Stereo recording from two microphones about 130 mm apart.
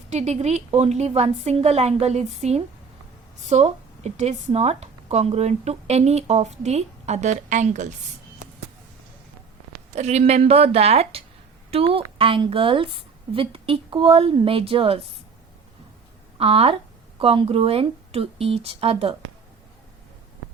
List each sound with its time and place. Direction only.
0.1 s speech: 60° right (ahead or behind)
9.9 s a woman's voice: 60° right (ahead or behind)
16.4 s a woman's voice: 50° right (ahead or behind)